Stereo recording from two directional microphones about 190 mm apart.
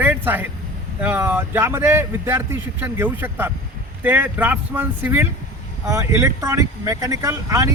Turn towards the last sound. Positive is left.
turn(degrees=-15)  # may be behind; listen again after turning